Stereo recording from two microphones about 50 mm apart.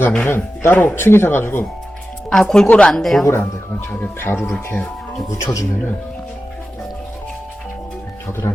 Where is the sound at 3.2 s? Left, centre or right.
Left.